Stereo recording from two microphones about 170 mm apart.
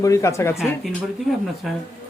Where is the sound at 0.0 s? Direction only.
15° left (ahead or behind).